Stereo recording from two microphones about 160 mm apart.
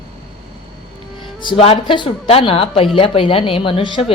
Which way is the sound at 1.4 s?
35° left (ahead or behind).